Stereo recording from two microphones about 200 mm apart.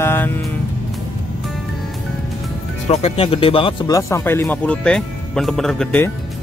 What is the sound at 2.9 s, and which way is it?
Speech, 30° left (ahead or behind).